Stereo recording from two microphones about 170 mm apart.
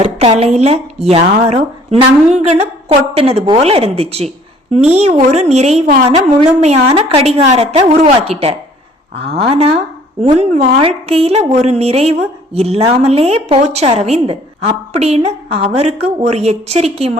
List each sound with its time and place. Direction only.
0.0 s a woman's voice: 35° right (ahead or behind)